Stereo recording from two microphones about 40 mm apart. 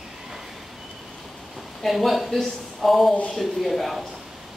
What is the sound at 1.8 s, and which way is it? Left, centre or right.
A woman's voice, centre.